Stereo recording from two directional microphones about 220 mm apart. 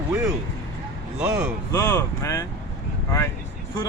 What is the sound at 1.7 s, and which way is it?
Speech, 10° left (ahead or behind).